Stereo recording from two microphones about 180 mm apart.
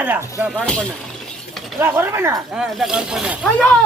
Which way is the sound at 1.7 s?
15° right (ahead or behind).